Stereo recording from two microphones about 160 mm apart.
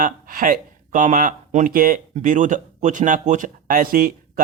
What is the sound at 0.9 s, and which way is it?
Speech, 55° right (ahead or behind).